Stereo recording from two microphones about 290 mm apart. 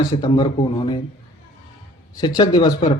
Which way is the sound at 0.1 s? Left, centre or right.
Centre.